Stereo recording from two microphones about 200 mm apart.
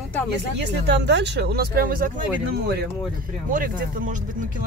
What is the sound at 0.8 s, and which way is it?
Speech, 60° right (ahead or behind).